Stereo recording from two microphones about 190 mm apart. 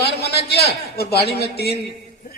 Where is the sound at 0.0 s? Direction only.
60° left (ahead or behind).